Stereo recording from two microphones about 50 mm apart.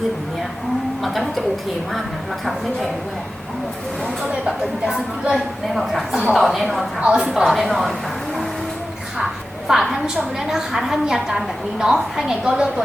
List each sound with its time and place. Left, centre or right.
1.0 s a woman's voice: centre
4.2 s a woman's voice: centre
5.3 s a woman's voice: centre
7.0 s a woman's voice: centre
7.7 s a woman's voice: centre
9.1 s a sound: centre
10.2 s a woman's voice: centre